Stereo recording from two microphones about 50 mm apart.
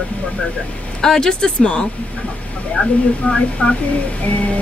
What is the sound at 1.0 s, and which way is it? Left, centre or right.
Speech, centre.